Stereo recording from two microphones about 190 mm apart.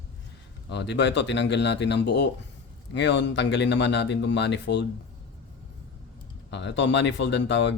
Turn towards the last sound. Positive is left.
turn(degrees=70)  # may be behind; listen again after turning